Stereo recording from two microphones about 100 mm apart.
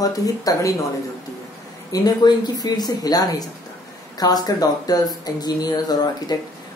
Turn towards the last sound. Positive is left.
turn(degrees=45)  # may be behind; listen again after turning